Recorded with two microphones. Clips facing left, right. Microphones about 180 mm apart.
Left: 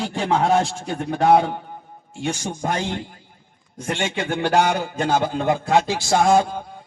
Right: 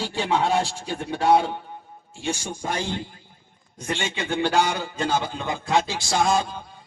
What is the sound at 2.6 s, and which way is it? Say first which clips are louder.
A man's voice: left 3 dB; 60° left (ahead or behind).